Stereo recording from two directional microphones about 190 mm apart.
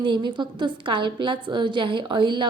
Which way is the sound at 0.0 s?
25° right (ahead or behind).